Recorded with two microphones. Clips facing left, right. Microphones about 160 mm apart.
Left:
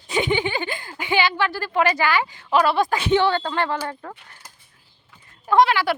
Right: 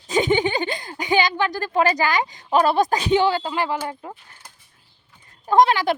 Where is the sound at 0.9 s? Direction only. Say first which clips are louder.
Right 1 dB; 40° right (ahead or behind).